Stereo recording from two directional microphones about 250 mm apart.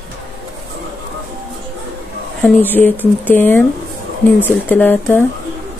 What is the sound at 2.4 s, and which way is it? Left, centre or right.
Speech, centre.